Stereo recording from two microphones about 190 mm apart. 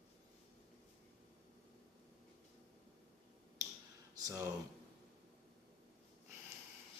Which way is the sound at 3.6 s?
20° right (ahead or behind).